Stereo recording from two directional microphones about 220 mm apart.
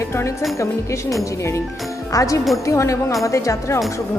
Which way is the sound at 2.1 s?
15° left (ahead or behind).